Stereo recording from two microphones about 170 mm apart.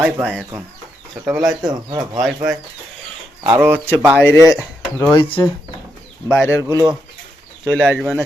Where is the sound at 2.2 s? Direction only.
Centre (ahead or behind).